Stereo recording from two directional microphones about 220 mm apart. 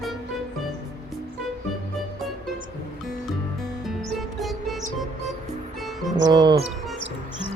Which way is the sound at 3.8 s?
Centre (ahead or behind).